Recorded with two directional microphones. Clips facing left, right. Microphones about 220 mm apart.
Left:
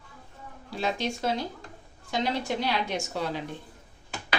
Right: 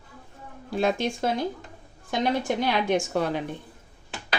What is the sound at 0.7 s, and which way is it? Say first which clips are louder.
A woman's voice: right 5 dB; 55° right (ahead or behind).